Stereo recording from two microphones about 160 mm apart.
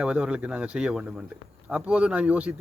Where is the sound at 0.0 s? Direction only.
5° right (ahead or behind).